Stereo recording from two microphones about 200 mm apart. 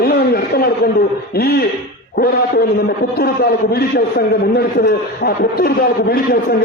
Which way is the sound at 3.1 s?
50° left (ahead or behind).